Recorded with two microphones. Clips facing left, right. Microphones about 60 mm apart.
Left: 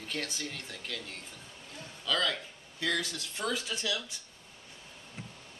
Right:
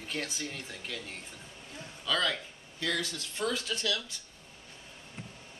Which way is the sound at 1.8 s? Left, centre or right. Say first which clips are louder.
Even; centre.